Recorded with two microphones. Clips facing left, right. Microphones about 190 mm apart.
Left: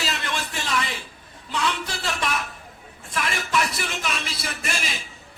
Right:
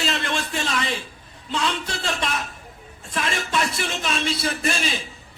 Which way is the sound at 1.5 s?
25° right (ahead or behind).